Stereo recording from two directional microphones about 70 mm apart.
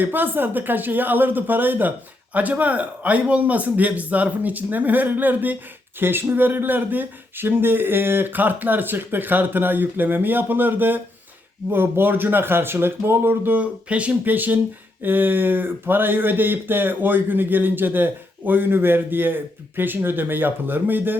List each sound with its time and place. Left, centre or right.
0.0 s speech: right
13.8 s speech: centre